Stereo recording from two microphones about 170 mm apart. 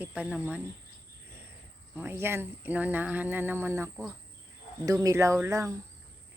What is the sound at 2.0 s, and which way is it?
Speech, 15° right (ahead or behind).